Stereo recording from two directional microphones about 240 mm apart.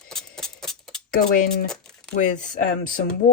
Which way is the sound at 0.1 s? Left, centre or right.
Centre.